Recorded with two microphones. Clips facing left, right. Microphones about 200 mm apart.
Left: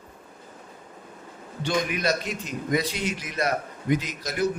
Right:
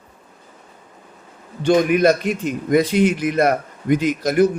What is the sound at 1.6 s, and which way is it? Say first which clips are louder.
A man's voice: right 11 dB; 55° right (ahead or behind).